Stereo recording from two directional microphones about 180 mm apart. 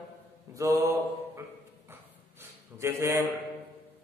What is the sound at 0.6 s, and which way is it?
Mantra, 15° right (ahead or behind).